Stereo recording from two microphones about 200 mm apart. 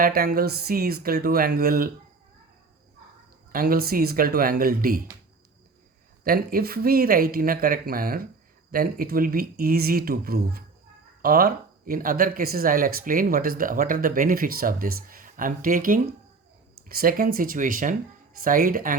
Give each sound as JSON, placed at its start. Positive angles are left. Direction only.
{"t": 0.0, "sound": "speech", "side_deg": -50}
{"t": 3.5, "sound": "speech", "side_deg": -45}
{"t": 6.2, "sound": "speech", "side_deg": -45}